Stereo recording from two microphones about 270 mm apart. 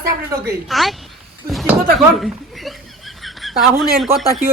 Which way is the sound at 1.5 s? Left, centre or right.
Centre.